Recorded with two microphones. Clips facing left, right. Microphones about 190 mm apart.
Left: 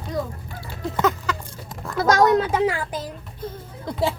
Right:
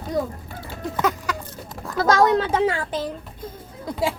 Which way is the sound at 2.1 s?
30° right (ahead or behind).